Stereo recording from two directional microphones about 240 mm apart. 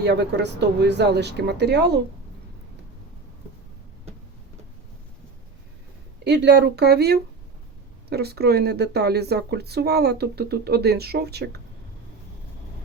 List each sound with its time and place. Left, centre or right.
0.0 s speech: right
6.2 s speech: right